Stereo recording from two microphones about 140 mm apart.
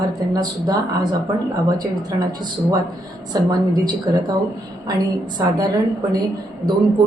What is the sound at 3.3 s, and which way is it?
Speech, 30° right (ahead or behind).